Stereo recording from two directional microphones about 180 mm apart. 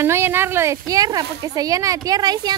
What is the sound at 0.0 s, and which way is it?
Speech, 15° right (ahead or behind).